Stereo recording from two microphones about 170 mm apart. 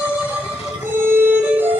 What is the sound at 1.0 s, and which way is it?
Music, 10° right (ahead or behind).